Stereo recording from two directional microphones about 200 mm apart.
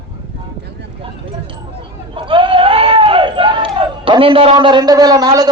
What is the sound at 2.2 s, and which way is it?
Speech, 25° right (ahead or behind).